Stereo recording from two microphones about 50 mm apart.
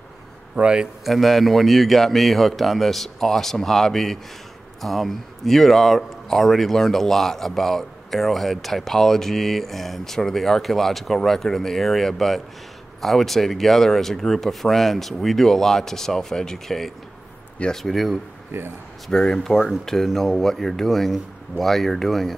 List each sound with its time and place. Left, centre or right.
0.6 s speech: right
1.0 s speech: centre
18.5 s speech: right
19.1 s speech: centre